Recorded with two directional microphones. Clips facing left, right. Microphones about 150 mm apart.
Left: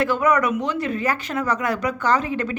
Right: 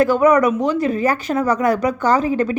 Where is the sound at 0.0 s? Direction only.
40° right (ahead or behind).